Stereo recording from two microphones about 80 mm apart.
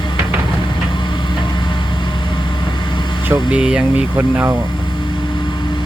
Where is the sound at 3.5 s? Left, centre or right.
Centre.